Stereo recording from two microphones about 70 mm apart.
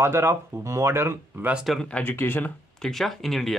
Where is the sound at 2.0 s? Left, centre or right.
Left.